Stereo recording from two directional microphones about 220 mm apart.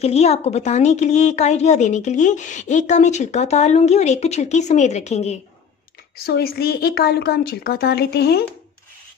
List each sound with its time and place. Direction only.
0.0 s a woman's voice: 30° left (ahead or behind)
6.1 s a woman's voice: 45° left (ahead or behind)